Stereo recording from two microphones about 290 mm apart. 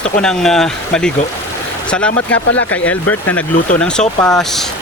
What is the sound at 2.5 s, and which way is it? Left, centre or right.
Speech, left.